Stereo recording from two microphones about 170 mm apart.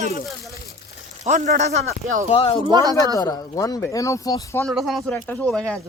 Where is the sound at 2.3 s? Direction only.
35° left (ahead or behind).